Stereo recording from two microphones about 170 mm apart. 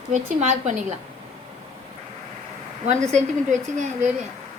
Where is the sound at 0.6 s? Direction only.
40° right (ahead or behind).